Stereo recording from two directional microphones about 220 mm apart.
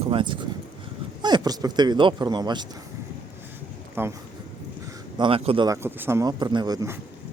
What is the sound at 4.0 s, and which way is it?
Speech, 10° right (ahead or behind).